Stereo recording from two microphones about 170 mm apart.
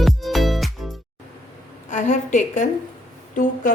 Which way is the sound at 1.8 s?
45° left (ahead or behind).